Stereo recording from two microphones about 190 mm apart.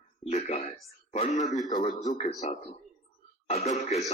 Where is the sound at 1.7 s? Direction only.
20° left (ahead or behind).